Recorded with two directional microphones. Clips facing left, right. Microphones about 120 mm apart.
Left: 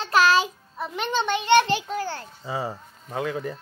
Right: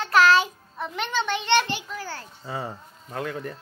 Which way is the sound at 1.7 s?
25° left (ahead or behind).